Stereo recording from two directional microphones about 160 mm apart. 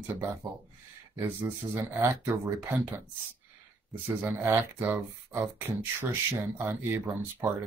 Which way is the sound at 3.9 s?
10° right (ahead or behind).